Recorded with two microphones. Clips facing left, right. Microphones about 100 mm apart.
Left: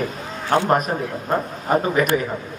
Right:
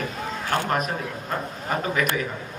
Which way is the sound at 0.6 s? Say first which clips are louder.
Left 8 dB; 45° left (ahead or behind).